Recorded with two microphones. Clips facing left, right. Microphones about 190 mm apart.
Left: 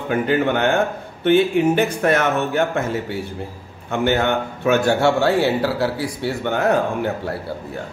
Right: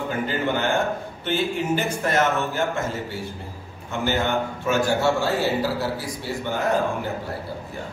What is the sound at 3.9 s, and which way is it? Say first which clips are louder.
A man's voice: left 5 dB; 60° left (ahead or behind).